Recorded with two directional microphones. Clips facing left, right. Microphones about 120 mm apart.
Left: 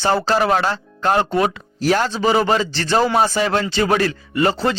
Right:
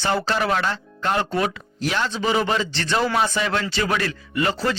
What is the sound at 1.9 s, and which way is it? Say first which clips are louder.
A man's voice: left 6 dB; 40° left (ahead or behind).